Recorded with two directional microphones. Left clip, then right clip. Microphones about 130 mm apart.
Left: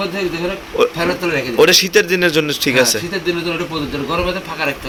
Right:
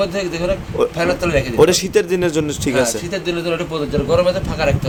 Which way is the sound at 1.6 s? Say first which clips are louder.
Left 4 dB; 25° right (ahead or behind).